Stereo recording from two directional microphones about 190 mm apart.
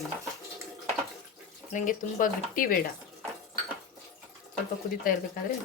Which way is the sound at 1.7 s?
45° left (ahead or behind).